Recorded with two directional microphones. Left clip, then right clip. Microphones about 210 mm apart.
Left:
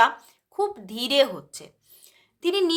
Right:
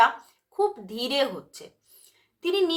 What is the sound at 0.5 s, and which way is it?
A woman's voice, 40° left (ahead or behind).